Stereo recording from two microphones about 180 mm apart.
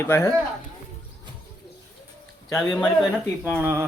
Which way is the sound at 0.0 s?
15° left (ahead or behind).